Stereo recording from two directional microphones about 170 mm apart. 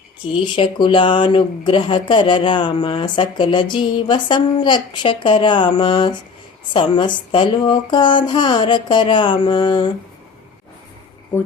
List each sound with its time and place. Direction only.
0.4 s speech: 30° left (ahead or behind)